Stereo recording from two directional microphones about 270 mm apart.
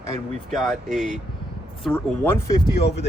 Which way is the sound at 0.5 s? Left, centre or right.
Centre.